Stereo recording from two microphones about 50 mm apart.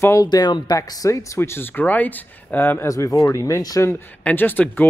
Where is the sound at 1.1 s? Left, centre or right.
Left.